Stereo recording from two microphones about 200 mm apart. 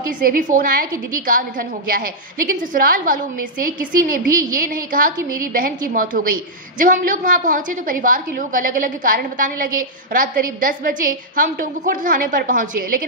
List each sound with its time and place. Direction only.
0.0 s a woman's voice: 45° right (ahead or behind)